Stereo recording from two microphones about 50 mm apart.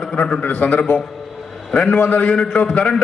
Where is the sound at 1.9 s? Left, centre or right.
Left.